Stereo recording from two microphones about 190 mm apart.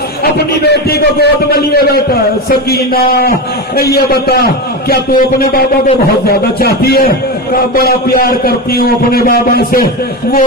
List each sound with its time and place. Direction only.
0.2 s a man's voice: 55° left (ahead or behind)